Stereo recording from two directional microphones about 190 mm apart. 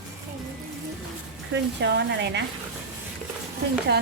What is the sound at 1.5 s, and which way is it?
Speech, 65° right (ahead or behind).